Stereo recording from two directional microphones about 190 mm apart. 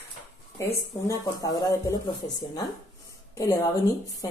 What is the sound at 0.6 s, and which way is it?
Speech, 20° left (ahead or behind).